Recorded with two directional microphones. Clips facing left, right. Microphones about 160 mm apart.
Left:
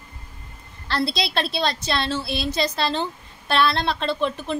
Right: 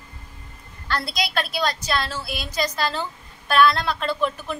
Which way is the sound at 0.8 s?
30° left (ahead or behind).